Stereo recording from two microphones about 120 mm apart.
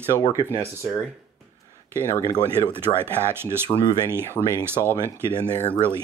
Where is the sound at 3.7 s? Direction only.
35° left (ahead or behind).